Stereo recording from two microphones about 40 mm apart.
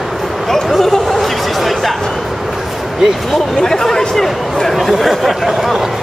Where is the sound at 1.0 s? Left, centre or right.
Centre.